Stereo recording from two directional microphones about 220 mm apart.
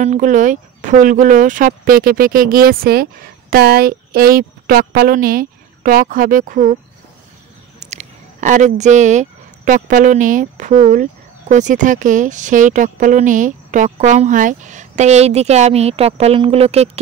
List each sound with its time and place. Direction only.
0.0 s speech: 35° right (ahead or behind)
7.8 s speech: 30° right (ahead or behind)